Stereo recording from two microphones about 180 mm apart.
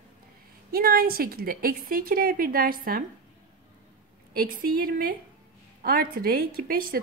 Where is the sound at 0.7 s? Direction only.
55° right (ahead or behind).